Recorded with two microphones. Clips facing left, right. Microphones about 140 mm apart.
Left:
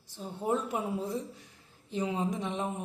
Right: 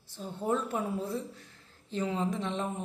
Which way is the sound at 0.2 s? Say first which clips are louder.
Even; 15° left (ahead or behind).